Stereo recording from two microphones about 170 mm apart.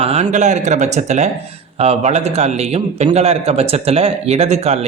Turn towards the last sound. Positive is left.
turn(degrees=-40)  # may be behind; listen again after turning